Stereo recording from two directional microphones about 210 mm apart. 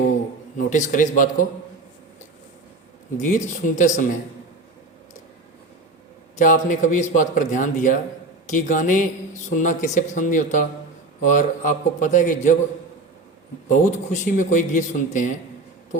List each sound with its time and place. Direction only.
0.5 s speech: 35° left (ahead or behind)
3.2 s speech: 35° left (ahead or behind)
6.3 s speech: 40° left (ahead or behind)
13.7 s speech: 40° left (ahead or behind)